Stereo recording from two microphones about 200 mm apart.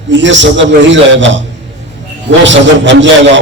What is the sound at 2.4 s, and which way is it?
Speech, 65° right (ahead or behind).